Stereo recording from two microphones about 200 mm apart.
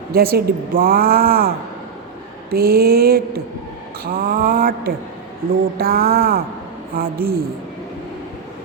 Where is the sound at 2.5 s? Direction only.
50° right (ahead or behind).